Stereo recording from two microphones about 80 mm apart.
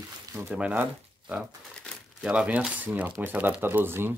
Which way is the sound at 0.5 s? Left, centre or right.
Centre.